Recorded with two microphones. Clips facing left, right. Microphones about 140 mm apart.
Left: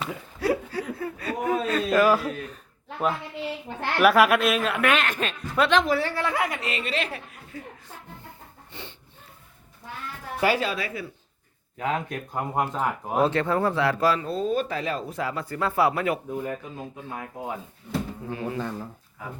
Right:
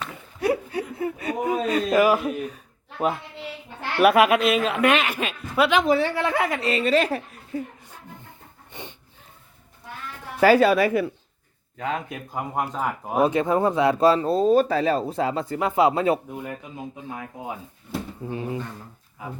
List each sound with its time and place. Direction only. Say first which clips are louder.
0.3 s laughter: right 2 dB; 20° right (ahead or behind)
4.0 s speech: right 2 dB; centre (ahead or behind)
5.8 s speech: right 4 dB; 20° right (ahead or behind); by 7.6 s 40° right (ahead or behind)
8.7 s snort: right 3 dB; 20° right (ahead or behind)
10.4 s speech: right 8 dB; 45° right (ahead or behind)
10.7 s speech: right 11 dB; 60° right (ahead or behind)
11.8 s speech: left 1 dB; centre (ahead or behind); by 16.2 s 25° right (ahead or behind)
18.3 s speech: right 3 dB; 25° right (ahead or behind)